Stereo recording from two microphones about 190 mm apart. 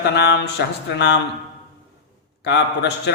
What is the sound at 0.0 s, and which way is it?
Speech, 65° left (ahead or behind).